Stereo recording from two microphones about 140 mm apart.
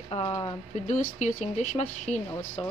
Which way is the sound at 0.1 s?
40° left (ahead or behind).